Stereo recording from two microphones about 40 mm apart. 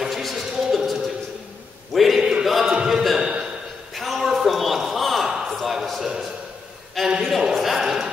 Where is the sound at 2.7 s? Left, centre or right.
Right.